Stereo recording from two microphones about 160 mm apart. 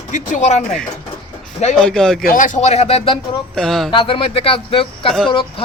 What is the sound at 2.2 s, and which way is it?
Speech, 55° left (ahead or behind).